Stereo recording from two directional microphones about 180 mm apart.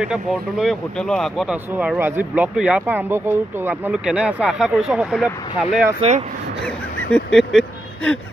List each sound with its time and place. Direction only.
0.0 s speech: 5° right (ahead or behind)
5.9 s speech: 40° right (ahead or behind)
6.6 s honk: 5° left (ahead or behind)